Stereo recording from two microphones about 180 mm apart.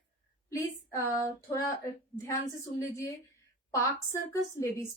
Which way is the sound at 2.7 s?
15° left (ahead or behind).